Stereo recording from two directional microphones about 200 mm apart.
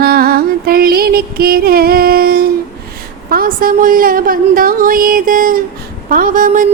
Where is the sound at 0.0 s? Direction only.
50° right (ahead or behind).